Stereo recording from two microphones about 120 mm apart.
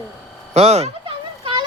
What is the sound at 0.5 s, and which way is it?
Speech, 60° right (ahead or behind).